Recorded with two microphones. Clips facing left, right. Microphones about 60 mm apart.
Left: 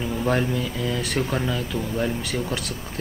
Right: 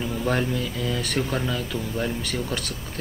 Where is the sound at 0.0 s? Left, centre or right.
Centre.